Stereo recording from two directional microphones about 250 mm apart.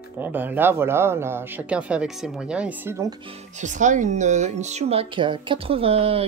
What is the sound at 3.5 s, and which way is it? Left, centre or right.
Speech, right.